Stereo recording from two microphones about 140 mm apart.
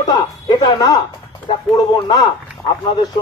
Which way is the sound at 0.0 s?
35° left (ahead or behind).